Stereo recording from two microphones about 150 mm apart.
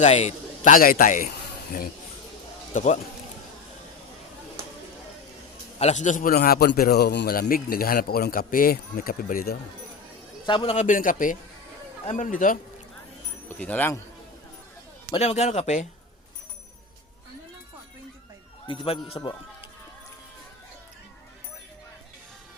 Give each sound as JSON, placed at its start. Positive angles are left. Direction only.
{"t": 0.0, "sound": "a man's voice", "side_deg": 50}
{"t": 2.7, "sound": "speech", "side_deg": 50}
{"t": 5.8, "sound": "a man's voice", "side_deg": 50}
{"t": 10.4, "sound": "speech", "side_deg": 35}
{"t": 10.8, "sound": "a man's voice", "side_deg": 60}
{"t": 13.6, "sound": "speech", "side_deg": 10}
{"t": 15.1, "sound": "speech", "side_deg": 45}
{"t": 18.7, "sound": "speech", "side_deg": 35}